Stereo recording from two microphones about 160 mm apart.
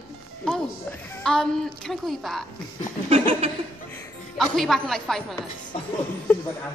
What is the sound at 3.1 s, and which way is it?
Chuckle, 35° right (ahead or behind).